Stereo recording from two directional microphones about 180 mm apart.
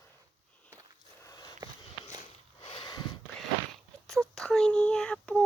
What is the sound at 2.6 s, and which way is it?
Sniff, 30° left (ahead or behind).